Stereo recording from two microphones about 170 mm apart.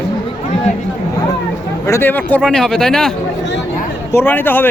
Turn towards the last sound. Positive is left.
turn(degrees=10)  # may be behind; listen again after turning